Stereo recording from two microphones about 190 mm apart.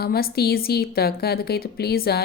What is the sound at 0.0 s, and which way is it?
A woman's voice, 55° left (ahead or behind).